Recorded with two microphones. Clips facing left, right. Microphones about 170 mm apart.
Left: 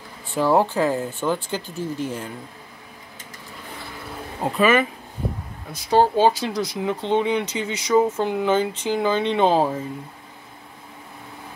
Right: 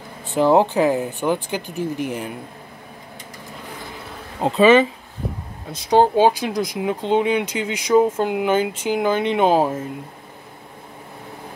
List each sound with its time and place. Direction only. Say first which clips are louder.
0.3 s speech: right 3 dB; 20° right (ahead or behind)
4.4 s speech: right 5 dB; 25° right (ahead or behind); by 9.8 s 10° right (ahead or behind)